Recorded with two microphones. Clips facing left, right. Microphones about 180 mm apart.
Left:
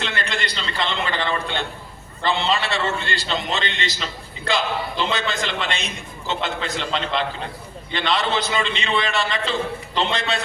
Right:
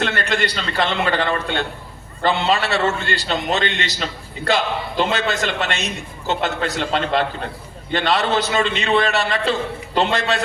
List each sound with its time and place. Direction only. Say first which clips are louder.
0.0 s a man's voice: right 6 dB; 50° right (ahead or behind)